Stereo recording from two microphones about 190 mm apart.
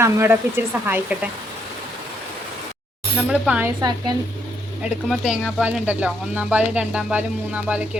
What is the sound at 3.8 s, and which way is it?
Speech, 20° right (ahead or behind).